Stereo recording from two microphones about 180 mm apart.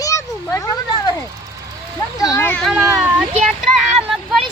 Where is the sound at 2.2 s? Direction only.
20° left (ahead or behind).